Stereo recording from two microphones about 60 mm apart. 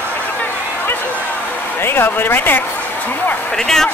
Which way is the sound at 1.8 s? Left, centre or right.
Left.